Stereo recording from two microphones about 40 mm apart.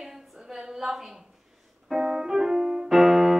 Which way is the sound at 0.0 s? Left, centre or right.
Centre.